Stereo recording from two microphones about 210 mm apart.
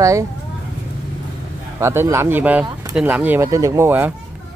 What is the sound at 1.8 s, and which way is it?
Speech, 10° right (ahead or behind).